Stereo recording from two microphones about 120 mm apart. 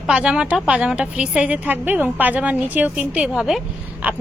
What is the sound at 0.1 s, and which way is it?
A woman's voice, 5° right (ahead or behind).